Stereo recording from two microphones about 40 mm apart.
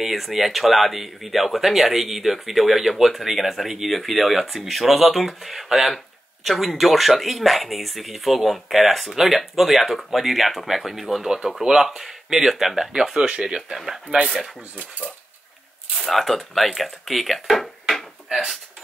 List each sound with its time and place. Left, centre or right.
0.0 s speech: centre
12.9 s speech: centre
16.0 s speech: centre
18.3 s speech: centre